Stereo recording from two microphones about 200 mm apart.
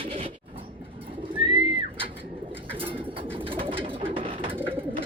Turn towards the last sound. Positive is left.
turn(degrees=-25)  # may be behind; listen again after turning